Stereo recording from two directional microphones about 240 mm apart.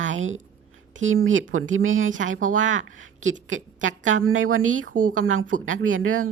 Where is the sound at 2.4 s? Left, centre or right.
Right.